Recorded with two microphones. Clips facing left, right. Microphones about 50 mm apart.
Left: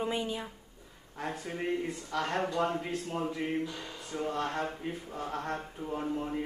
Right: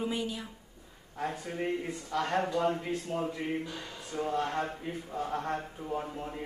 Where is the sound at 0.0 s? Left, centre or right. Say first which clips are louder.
Left 1 dB; left.